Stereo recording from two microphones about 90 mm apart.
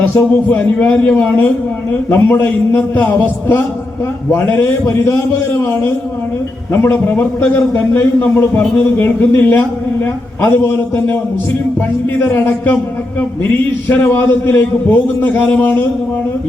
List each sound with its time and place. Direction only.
0.0 s a man's voice: 20° left (ahead or behind)
12.2 s a man's voice: 25° left (ahead or behind)